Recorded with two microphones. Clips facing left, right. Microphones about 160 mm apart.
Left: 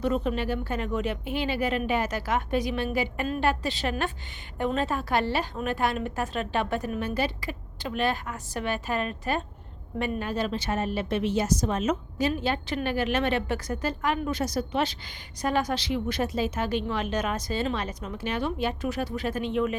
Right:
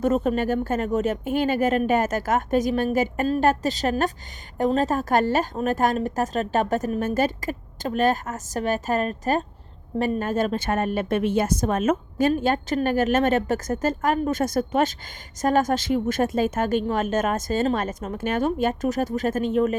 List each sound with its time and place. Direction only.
0.0 s a woman's voice: 45° right (ahead or behind)